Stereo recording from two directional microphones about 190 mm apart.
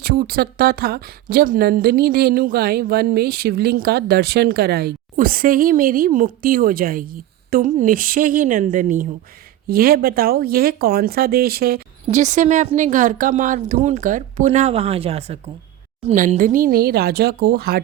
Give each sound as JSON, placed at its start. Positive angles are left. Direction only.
{"t": 0.0, "sound": "speech", "side_deg": -55}
{"t": 12.0, "sound": "a woman's voice", "side_deg": -40}